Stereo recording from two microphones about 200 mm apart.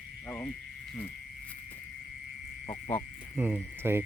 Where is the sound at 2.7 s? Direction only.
15° left (ahead or behind).